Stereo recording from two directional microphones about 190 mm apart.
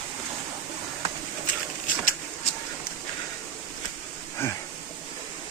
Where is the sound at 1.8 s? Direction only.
45° left (ahead or behind).